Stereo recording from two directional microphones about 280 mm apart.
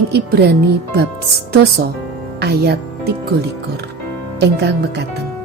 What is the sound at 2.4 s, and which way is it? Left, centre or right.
Speech, right.